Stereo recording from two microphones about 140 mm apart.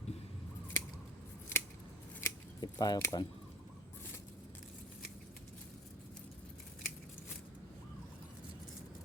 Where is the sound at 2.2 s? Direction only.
30° left (ahead or behind).